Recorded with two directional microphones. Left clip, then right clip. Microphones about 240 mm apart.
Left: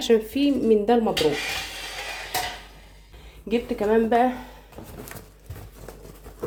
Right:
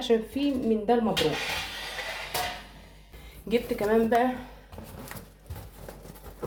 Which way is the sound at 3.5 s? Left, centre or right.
Left.